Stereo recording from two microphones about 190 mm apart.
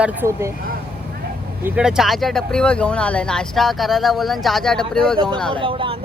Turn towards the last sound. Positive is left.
turn(degrees=-30)  # may be behind; listen again after turning